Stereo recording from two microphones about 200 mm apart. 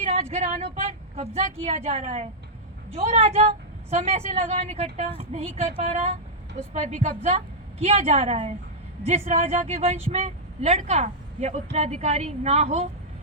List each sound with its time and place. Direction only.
0.0 s a woman's voice: 30° right (ahead or behind)